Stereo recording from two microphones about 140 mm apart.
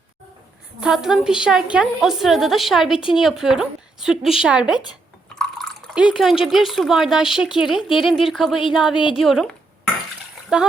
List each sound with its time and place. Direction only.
0.8 s a woman's voice: 5° right (ahead or behind)
5.4 s a sound: centre (ahead or behind)
5.9 s a woman's voice: 5° right (ahead or behind)
9.0 s speech: 35° left (ahead or behind)
9.2 s a woman's voice: centre (ahead or behind)